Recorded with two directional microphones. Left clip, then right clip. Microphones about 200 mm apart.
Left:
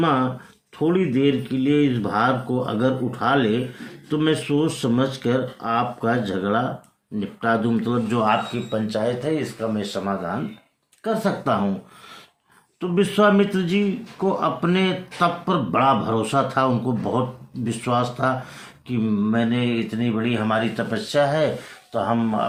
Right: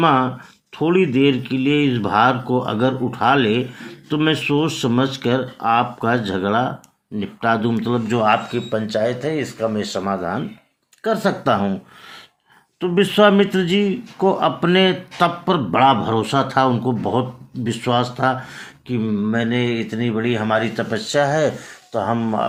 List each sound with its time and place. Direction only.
0.0 s speech: 35° right (ahead or behind)
12.8 s speech: 35° right (ahead or behind)
18.9 s speech: 20° right (ahead or behind)